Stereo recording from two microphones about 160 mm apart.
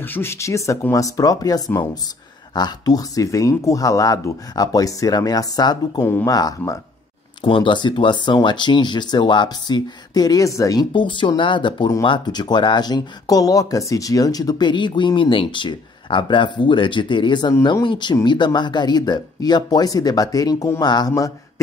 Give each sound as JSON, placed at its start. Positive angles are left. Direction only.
{"t": 0.0, "sound": "speech", "side_deg": 15}